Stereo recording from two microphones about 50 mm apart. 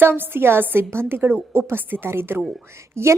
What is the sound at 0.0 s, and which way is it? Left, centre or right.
A woman's voice, right.